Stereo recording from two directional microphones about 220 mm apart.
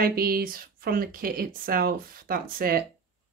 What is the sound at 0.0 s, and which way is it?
Speech, 40° right (ahead or behind).